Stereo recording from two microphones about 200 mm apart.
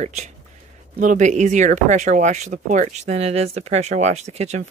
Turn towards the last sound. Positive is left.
turn(degrees=-35)  # may be behind; listen again after turning